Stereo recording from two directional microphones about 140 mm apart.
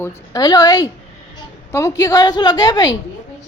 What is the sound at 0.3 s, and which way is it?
A woman's voice, 30° left (ahead or behind).